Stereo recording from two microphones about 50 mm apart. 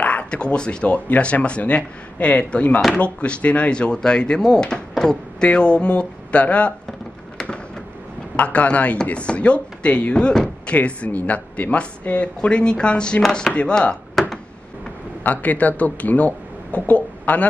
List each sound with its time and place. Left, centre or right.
0.0 s speech: left
8.4 s speech: left
10.7 s speech: left
15.2 s speech: left